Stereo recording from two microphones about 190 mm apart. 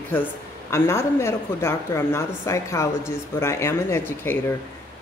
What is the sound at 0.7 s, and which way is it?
Speech, 15° left (ahead or behind).